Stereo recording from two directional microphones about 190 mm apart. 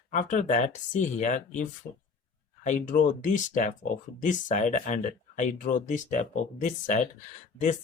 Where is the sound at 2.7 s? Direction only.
40° left (ahead or behind).